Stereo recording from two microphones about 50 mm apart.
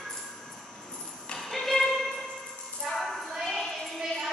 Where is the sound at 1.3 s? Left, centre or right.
Centre.